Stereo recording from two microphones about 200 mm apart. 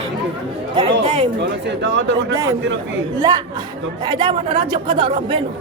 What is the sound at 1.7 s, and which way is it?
Speech, 65° right (ahead or behind).